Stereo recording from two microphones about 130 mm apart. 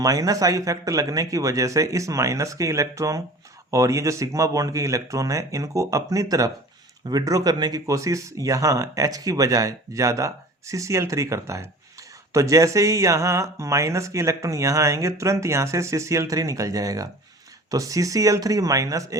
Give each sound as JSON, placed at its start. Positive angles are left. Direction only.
{"t": 0.0, "sound": "speech", "side_deg": -25}